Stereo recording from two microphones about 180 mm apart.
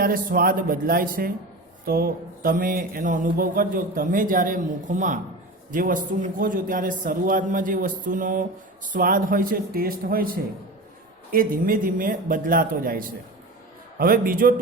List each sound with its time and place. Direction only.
0.0 s speech: 55° right (ahead or behind)